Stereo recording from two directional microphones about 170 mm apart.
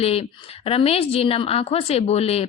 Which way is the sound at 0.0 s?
35° left (ahead or behind).